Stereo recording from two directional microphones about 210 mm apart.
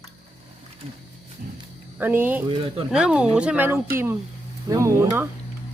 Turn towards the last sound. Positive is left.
turn(degrees=-10)  # may be behind; listen again after turning